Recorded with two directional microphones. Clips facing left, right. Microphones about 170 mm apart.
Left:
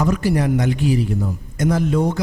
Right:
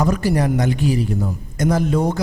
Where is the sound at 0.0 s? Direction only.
40° right (ahead or behind).